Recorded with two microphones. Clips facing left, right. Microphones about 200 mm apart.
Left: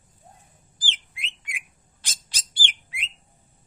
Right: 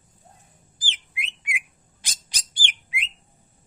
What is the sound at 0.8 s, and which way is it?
Bird, 15° right (ahead or behind).